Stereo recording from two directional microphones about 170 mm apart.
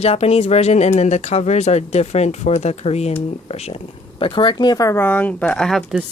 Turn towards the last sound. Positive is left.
turn(degrees=5)  # may be behind; listen again after turning